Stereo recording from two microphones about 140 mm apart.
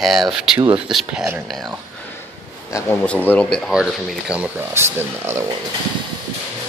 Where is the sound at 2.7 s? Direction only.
15° left (ahead or behind).